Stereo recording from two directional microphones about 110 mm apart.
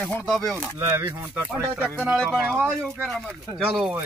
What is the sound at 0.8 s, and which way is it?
Speech, 20° right (ahead or behind).